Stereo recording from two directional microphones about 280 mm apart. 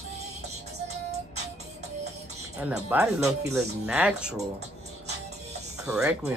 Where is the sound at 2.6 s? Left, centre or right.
Centre.